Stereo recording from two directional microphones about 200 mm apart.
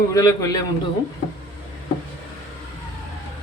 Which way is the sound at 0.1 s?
15° left (ahead or behind).